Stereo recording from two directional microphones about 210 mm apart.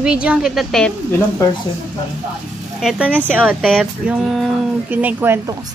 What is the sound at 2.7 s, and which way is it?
Speech, 5° right (ahead or behind).